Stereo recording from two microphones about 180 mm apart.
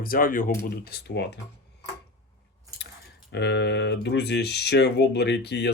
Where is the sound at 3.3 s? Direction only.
75° left (ahead or behind).